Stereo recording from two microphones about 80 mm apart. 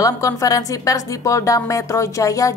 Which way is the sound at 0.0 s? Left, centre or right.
Left.